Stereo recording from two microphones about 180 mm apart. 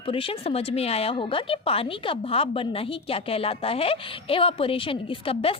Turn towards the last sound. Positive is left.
turn(degrees=30)  # may be behind; listen again after turning